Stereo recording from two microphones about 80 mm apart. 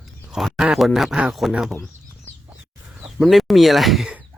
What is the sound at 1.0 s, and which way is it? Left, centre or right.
Speech, centre.